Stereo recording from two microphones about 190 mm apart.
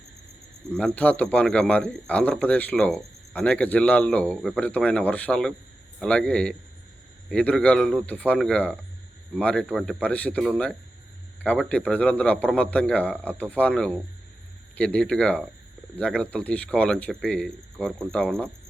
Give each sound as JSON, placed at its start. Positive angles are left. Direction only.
{"t": 0.8, "sound": "a man's voice", "side_deg": 5}